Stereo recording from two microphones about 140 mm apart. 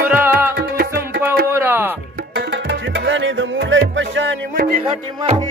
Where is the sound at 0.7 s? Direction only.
90° right.